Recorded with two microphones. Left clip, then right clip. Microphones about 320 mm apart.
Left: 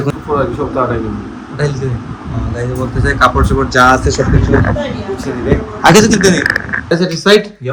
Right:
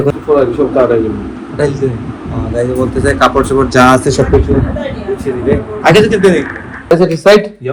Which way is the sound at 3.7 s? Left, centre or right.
Right.